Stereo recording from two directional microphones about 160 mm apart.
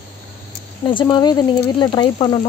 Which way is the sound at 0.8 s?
30° left (ahead or behind).